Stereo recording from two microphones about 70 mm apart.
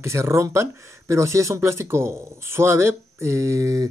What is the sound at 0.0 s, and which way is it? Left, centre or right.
Speech, right.